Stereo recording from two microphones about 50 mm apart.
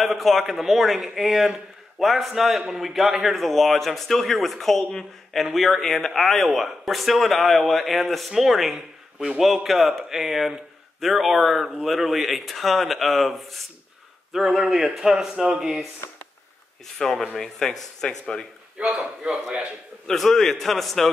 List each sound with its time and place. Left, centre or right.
0.0 s speech: centre
3.3 s a man's voice: centre
16.8 s speech: centre
18.9 s a man's voice: right
20.1 s speech: centre